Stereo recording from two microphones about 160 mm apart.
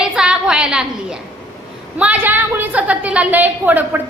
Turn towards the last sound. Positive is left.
turn(degrees=-10)  # may be behind; listen again after turning